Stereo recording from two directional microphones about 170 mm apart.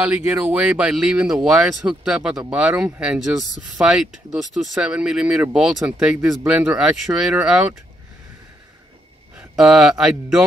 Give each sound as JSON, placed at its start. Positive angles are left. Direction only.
{"t": 0.0, "sound": "speech", "side_deg": -10}
{"t": 9.3, "sound": "speech", "side_deg": -5}